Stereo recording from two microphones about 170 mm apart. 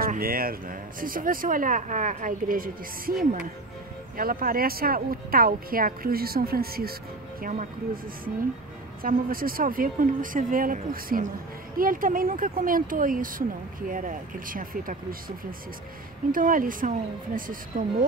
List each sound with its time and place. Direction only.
0.0 s speech: 60° right (ahead or behind)
4.2 s speech: 60° right (ahead or behind)
9.0 s speech: 55° right (ahead or behind)